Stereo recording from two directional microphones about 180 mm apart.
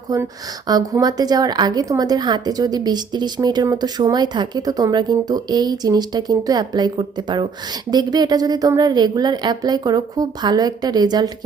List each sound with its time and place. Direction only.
0.7 s a woman's voice: 20° right (ahead or behind)